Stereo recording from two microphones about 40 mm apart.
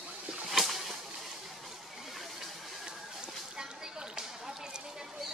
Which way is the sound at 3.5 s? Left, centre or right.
Centre.